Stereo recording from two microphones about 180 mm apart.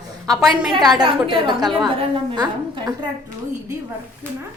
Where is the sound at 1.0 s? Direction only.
25° right (ahead or behind).